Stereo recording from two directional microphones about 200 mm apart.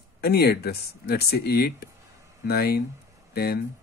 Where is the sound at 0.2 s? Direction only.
50° left (ahead or behind).